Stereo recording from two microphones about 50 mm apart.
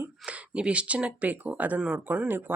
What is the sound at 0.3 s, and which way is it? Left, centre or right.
Speech, right.